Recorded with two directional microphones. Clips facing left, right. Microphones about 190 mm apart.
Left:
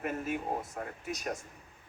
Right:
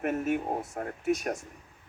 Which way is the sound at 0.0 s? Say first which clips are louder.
Right 6 dB; 70° right (ahead or behind).